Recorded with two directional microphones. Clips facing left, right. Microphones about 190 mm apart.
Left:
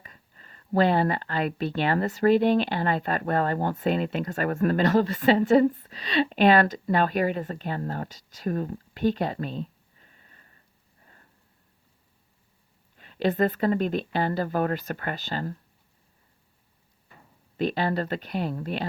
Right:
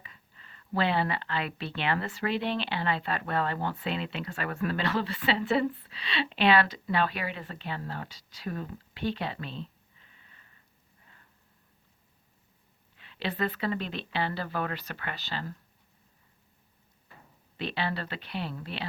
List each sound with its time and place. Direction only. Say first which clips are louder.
0.0 s speech: left 3 dB; 45° left (ahead or behind)
11.0 s a sound: left 4 dB; 40° left (ahead or behind)
13.0 s speech: left 8 dB; 45° left (ahead or behind)
17.6 s speech: left 7 dB; 45° left (ahead or behind)